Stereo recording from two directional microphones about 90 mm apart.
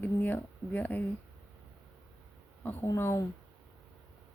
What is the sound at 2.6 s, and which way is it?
Speech, 20° left (ahead or behind).